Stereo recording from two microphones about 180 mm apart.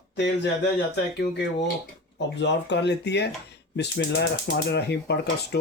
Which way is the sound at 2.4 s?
75° left (ahead or behind).